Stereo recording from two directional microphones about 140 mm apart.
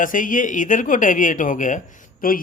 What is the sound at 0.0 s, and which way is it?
Speech, 70° left (ahead or behind).